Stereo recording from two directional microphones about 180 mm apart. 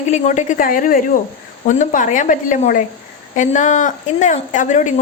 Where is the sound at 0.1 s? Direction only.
40° left (ahead or behind).